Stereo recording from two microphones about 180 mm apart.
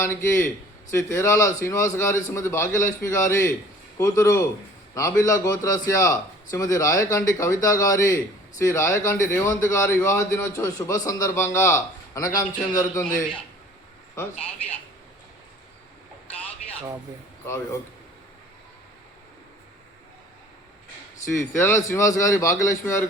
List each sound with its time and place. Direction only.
0.0 s a man's voice: 15° left (ahead or behind)
17.4 s a man's voice: 15° left (ahead or behind)
21.3 s a man's voice: 15° left (ahead or behind)